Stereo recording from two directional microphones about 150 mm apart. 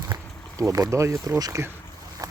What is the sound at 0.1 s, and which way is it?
Speech, 25° right (ahead or behind).